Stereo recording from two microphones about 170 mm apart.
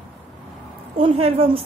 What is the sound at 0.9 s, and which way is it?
Speech, 35° right (ahead or behind).